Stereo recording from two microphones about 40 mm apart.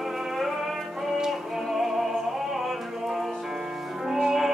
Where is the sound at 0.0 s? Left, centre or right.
Centre.